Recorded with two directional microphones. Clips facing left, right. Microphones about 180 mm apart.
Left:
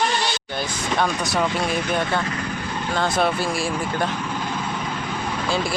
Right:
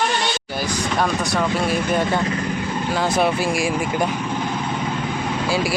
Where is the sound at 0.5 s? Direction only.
5° right (ahead or behind).